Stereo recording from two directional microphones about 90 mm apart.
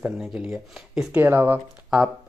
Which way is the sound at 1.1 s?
20° right (ahead or behind).